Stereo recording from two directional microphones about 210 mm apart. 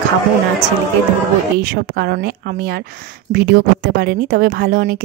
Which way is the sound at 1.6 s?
50° right (ahead or behind).